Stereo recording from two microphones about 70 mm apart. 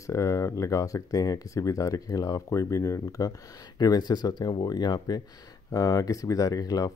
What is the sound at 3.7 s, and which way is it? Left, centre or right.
Speech, left.